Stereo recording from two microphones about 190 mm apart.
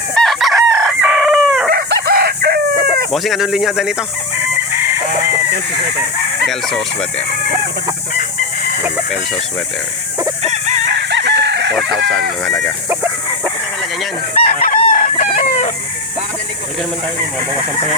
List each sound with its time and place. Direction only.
0.1 s chicken: centre (ahead or behind)
1.7 s chicken: 55° right (ahead or behind)
3.1 s speech: centre (ahead or behind)
6.5 s speech: centre (ahead or behind)
8.8 s speech: centre (ahead or behind)
10.8 s chicken: 65° right (ahead or behind)
11.7 s speech: centre (ahead or behind)
14.3 s chicken: 45° left (ahead or behind)